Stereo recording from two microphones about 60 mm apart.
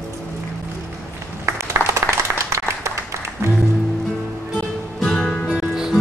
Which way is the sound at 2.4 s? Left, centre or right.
Right.